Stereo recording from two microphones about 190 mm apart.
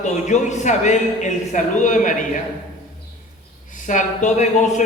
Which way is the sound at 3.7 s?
40° left (ahead or behind).